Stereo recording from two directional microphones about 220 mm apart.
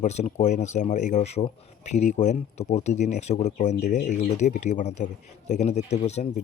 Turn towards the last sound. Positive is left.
turn(degrees=30)  # may be behind; listen again after turning